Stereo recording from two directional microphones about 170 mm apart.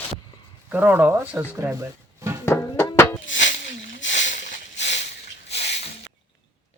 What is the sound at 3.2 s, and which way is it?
Sneeze, 90° left.